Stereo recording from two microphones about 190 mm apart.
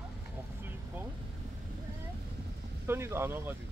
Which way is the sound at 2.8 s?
15° right (ahead or behind).